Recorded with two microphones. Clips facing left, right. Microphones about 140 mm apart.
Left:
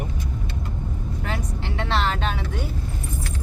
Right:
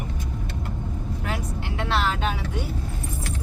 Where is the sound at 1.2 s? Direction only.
10° right (ahead or behind).